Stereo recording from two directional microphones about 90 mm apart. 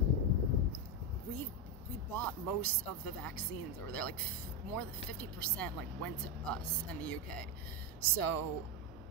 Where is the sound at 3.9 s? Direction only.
15° left (ahead or behind).